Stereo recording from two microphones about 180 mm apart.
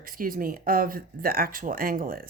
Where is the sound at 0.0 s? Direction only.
50° right (ahead or behind).